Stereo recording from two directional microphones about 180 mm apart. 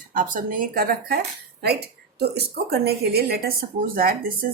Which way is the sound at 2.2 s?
60° right (ahead or behind).